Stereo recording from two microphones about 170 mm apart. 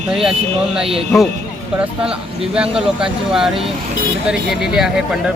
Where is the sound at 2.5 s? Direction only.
5° right (ahead or behind).